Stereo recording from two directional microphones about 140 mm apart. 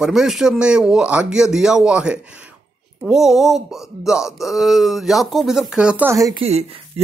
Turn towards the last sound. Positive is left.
turn(degrees=-45)  # may be behind; listen again after turning